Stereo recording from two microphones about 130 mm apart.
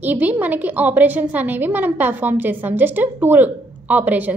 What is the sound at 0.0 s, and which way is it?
A woman's voice, 15° right (ahead or behind).